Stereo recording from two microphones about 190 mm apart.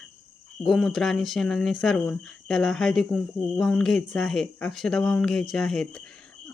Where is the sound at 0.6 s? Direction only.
Centre (ahead or behind).